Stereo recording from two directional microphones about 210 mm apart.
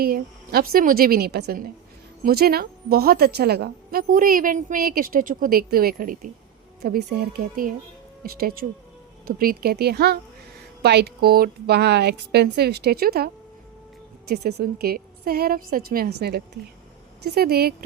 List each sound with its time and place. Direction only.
0.0 s a woman's voice: 45° right (ahead or behind)
17.3 s a woman's voice: 50° right (ahead or behind)